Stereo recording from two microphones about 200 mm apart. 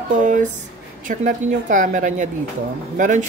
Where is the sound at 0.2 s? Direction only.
40° right (ahead or behind).